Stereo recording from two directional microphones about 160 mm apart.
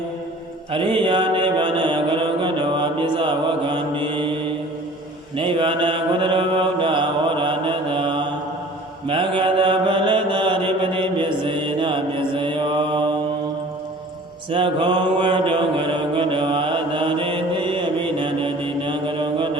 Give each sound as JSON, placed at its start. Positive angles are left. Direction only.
{"t": 0.7, "sound": "mantra", "side_deg": -30}
{"t": 5.4, "sound": "mantra", "side_deg": -35}
{"t": 14.5, "sound": "mantra", "side_deg": -30}